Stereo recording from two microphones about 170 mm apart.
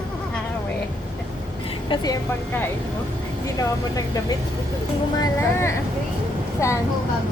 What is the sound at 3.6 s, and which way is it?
Speech, 20° left (ahead or behind).